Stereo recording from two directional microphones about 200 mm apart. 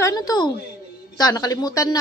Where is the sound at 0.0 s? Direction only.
20° left (ahead or behind).